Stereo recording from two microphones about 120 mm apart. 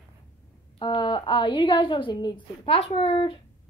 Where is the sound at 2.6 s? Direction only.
50° left (ahead or behind).